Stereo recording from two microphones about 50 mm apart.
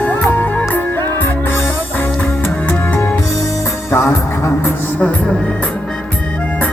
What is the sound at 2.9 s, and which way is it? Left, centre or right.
Music, left.